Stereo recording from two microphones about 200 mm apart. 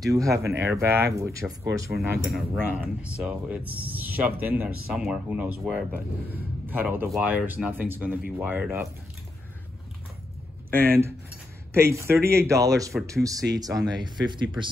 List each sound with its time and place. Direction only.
0.1 s speech: 15° right (ahead or behind)
2.0 s speech: centre (ahead or behind)
11.7 s speech: 15° right (ahead or behind)